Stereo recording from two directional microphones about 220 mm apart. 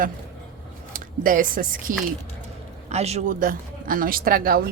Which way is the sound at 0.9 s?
40° right (ahead or behind).